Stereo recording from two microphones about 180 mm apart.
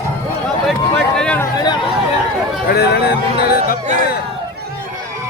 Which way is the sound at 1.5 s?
25° left (ahead or behind).